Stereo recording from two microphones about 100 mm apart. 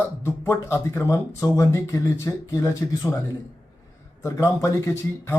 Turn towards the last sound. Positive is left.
turn(degrees=25)  # may be behind; listen again after turning